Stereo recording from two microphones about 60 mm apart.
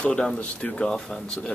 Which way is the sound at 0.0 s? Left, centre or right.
Centre.